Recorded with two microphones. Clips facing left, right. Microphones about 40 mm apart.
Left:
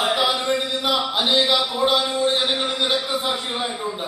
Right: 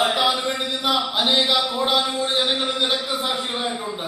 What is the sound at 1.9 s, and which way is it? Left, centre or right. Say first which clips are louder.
Speech: even; right.